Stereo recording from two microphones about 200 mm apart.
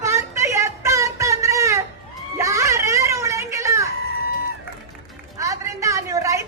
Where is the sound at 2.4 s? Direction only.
15° right (ahead or behind).